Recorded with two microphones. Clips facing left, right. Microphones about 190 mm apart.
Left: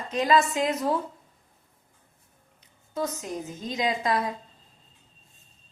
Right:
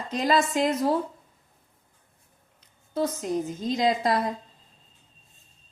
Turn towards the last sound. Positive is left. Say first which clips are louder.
# right 3 dB
turn(degrees=-35)  # may be behind; listen again after turning